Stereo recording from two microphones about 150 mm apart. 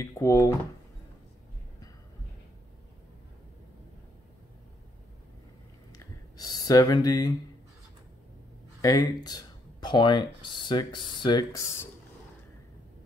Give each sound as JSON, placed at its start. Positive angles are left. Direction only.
{"t": 0.0, "sound": "speech", "side_deg": 20}
{"t": 5.9, "sound": "a sound", "side_deg": 25}
{"t": 8.8, "sound": "speech", "side_deg": 25}